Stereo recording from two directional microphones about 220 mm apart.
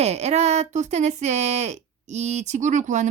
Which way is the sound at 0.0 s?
30° right (ahead or behind).